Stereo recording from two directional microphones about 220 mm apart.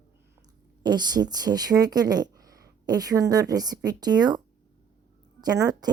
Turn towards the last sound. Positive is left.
turn(degrees=-15)  # may be behind; listen again after turning